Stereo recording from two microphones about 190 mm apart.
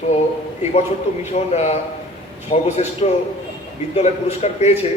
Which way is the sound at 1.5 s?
35° left (ahead or behind).